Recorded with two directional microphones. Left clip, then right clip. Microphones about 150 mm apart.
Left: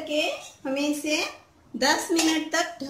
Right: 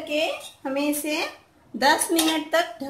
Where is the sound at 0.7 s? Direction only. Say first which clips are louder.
Right 1 dB; 35° right (ahead or behind).